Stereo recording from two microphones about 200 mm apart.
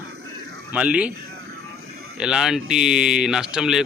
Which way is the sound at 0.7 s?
5° right (ahead or behind).